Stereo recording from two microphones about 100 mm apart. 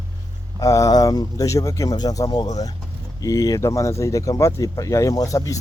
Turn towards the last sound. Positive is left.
turn(degrees=35)  # may be behind; listen again after turning